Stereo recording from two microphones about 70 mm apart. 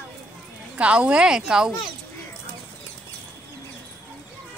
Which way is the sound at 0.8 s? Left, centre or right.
Centre.